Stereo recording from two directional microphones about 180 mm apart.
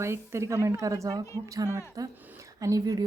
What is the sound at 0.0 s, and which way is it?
Speech, 15° right (ahead or behind).